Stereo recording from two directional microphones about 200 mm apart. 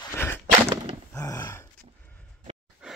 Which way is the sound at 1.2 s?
15° left (ahead or behind).